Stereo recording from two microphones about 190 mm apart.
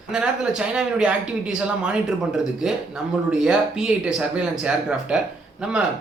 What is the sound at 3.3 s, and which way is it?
A man's voice, 5° right (ahead or behind).